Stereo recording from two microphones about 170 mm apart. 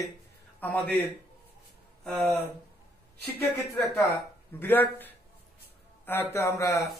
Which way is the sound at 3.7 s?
20° left (ahead or behind).